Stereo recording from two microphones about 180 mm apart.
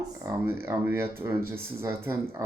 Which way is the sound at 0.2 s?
15° right (ahead or behind).